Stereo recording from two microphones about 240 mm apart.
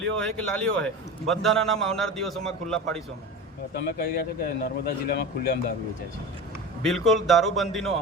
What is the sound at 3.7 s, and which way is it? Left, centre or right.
Speech, left.